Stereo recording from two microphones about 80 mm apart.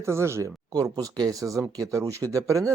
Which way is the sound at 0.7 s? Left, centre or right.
Right.